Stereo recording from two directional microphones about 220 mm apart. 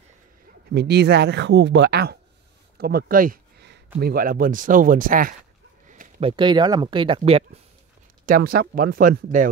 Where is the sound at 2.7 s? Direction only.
45° right (ahead or behind).